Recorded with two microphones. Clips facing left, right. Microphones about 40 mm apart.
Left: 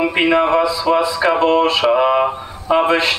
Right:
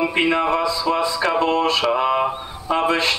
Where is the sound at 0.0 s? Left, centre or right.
Centre.